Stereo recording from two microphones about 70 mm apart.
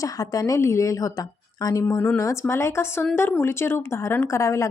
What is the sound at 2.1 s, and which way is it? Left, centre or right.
A woman's voice, left.